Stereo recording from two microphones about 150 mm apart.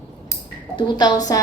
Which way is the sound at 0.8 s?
30° left (ahead or behind).